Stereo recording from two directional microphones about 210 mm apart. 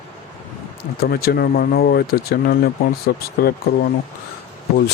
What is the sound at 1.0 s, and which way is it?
Speech, 45° left (ahead or behind).